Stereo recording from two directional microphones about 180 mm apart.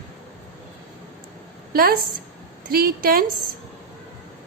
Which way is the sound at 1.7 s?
55° right (ahead or behind).